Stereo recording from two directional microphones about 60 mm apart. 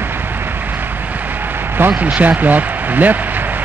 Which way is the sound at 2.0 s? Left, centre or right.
Right.